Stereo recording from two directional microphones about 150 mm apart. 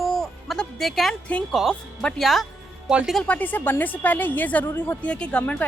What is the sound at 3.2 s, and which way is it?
A woman's voice, 10° left (ahead or behind).